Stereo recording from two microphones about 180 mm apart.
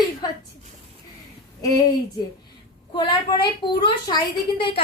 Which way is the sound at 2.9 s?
25° left (ahead or behind).